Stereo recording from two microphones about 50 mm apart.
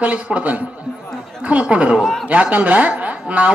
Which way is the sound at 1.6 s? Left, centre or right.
Right.